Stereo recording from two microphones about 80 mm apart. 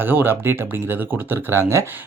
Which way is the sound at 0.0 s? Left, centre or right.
Right.